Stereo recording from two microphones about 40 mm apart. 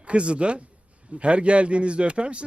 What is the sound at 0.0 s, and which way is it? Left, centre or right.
Speech, right.